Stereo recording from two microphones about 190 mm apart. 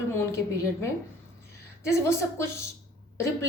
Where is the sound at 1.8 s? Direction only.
15° left (ahead or behind).